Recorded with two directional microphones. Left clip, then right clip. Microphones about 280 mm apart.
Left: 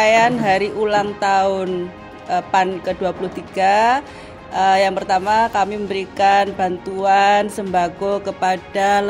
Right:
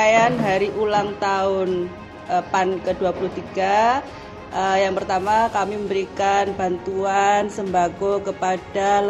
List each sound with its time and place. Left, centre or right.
0.0 s music: left